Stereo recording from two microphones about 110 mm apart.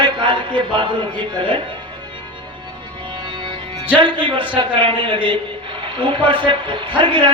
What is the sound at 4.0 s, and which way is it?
A man's voice, 45° right (ahead or behind).